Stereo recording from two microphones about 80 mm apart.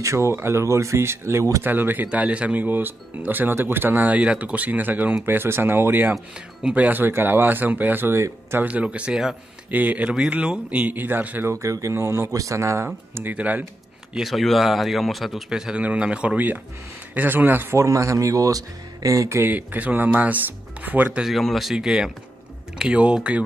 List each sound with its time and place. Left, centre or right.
0.0 s speech: right
1.6 s speech: right
8.6 s speech: centre
9.7 s speech: right
11.5 s speech: right
13.3 s speech: centre
14.1 s a man's voice: centre; by 17.7 s right
17.7 s speech: right
19.5 s speech: right
21.2 s a man's voice: centre